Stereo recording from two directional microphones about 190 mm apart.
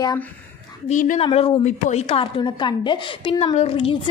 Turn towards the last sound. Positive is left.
turn(degrees=30)  # may be behind; listen again after turning